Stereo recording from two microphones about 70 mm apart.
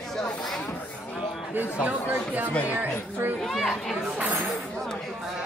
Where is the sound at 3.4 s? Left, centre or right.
Centre.